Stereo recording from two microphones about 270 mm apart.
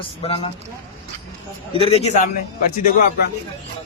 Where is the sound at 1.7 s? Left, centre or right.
Left.